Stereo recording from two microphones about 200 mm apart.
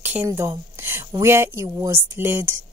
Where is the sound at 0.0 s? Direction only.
10° right (ahead or behind).